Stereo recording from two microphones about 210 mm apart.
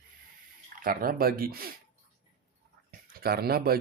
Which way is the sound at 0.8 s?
45° right (ahead or behind).